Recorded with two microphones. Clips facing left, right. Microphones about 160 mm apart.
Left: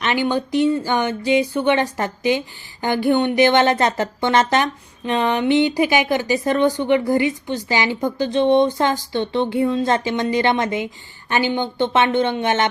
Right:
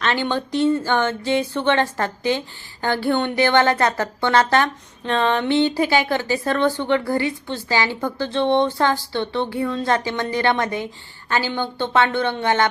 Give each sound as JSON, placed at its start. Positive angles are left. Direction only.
{"t": 0.0, "sound": "a woman's voice", "side_deg": 15}